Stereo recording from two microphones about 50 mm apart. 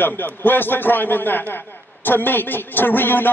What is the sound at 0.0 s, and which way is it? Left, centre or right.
A man's voice, left.